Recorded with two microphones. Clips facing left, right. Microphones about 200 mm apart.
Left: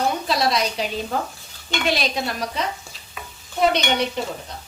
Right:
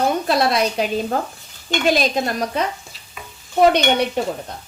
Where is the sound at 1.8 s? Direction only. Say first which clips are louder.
Right 5 dB; 45° right (ahead or behind).